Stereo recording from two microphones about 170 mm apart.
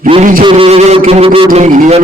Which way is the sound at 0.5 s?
40° right (ahead or behind).